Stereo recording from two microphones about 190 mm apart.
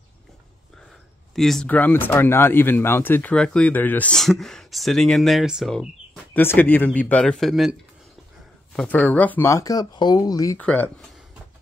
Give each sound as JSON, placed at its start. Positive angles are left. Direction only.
{"t": 1.3, "sound": "speech", "side_deg": 0}
{"t": 6.3, "sound": "speech", "side_deg": 10}
{"t": 8.7, "sound": "speech", "side_deg": 10}
{"t": 10.6, "sound": "speech", "side_deg": 5}